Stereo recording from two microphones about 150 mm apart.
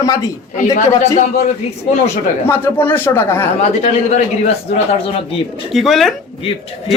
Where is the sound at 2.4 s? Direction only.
15° left (ahead or behind).